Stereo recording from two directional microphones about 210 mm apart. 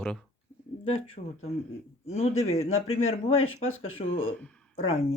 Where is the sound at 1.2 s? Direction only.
35° left (ahead or behind).